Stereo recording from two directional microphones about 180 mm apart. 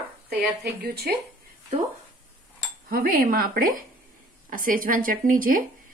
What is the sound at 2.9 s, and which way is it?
Speech, 55° right (ahead or behind).